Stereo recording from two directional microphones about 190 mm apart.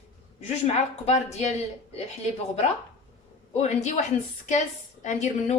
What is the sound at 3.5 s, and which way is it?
A woman's voice, 35° left (ahead or behind).